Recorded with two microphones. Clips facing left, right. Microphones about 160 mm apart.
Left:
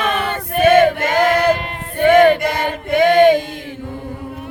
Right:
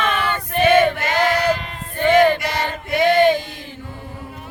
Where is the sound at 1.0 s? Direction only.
50° left (ahead or behind).